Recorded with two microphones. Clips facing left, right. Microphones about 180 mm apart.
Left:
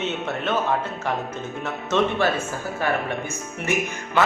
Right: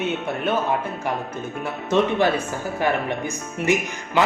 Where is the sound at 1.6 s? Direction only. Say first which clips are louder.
Right 2 dB; 15° right (ahead or behind).